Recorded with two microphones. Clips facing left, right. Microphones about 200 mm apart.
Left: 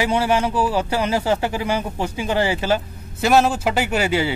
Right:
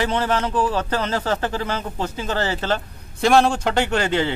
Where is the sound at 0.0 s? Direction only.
10° left (ahead or behind).